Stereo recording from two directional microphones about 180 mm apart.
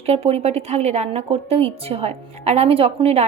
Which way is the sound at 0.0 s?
35° right (ahead or behind).